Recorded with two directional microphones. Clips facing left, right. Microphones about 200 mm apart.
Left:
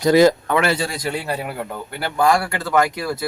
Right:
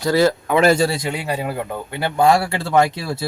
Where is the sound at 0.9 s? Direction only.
20° right (ahead or behind).